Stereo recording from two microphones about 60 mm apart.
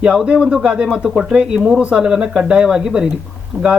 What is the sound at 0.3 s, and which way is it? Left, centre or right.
Speech, centre.